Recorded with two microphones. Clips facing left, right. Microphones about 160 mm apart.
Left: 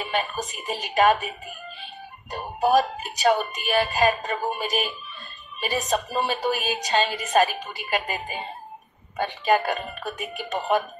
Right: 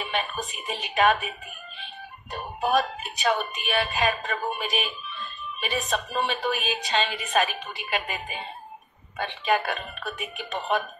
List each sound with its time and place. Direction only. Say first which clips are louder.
0.0 s speech: left 3 dB; 40° left (ahead or behind)
2.3 s speech: left 4 dB; 40° left (ahead or behind)